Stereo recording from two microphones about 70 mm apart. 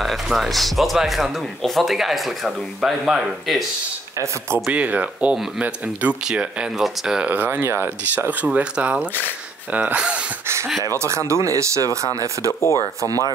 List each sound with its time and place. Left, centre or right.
0.0 s speech: centre
4.6 s speech: centre
7.2 s speech: right
7.6 s speech: right
8.1 s speech: right
9.9 s speech: centre
11.0 s speech: right
12.5 s speech: left